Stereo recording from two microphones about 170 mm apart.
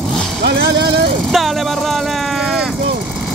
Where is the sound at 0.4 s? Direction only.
70° right (ahead or behind).